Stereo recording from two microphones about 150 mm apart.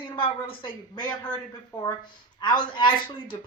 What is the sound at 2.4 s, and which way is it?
Speech, 30° left (ahead or behind).